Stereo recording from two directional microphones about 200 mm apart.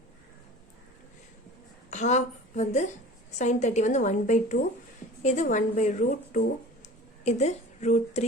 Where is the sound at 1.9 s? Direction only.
35° left (ahead or behind).